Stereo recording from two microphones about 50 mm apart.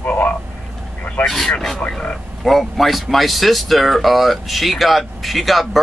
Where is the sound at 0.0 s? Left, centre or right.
Left.